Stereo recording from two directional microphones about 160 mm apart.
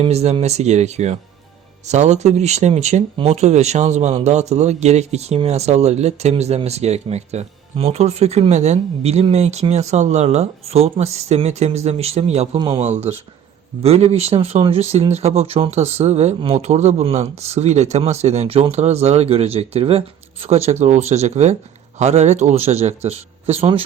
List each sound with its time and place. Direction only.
0.0 s speech: 40° right (ahead or behind)
12.5 s speech: 25° right (ahead or behind)
12.8 s speech: 45° right (ahead or behind)